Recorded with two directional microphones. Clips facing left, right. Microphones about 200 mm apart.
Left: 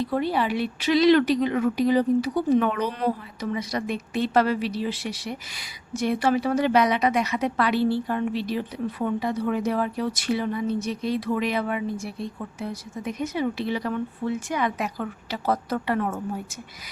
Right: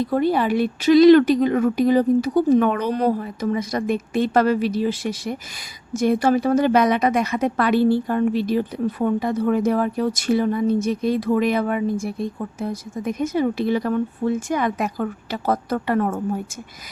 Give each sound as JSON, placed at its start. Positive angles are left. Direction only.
{"t": 0.0, "sound": "a woman's voice", "side_deg": -45}